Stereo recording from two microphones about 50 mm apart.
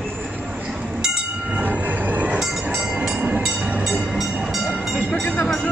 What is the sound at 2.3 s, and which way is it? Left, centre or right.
Train, centre.